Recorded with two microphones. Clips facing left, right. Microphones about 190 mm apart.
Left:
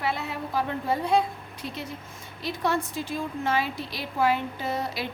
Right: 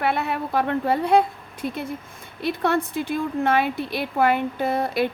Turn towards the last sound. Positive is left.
turn(degrees=-55)  # may be behind; listen again after turning